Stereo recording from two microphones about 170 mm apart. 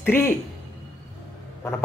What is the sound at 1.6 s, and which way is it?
Speech, 15° left (ahead or behind).